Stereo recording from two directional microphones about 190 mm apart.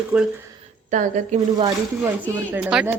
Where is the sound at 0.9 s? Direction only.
40° right (ahead or behind).